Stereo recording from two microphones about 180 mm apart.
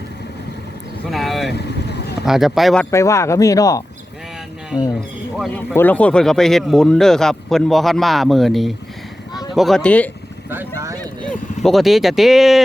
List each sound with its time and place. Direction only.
1.1 s vehicle: centre (ahead or behind)
1.5 s vehicle: 65° left (ahead or behind)
2.2 s speech: centre (ahead or behind)
2.9 s speech: 15° left (ahead or behind)
4.9 s speech: 5° left (ahead or behind)
10.5 s speech: 15° right (ahead or behind)
11.3 s speech: centre (ahead or behind)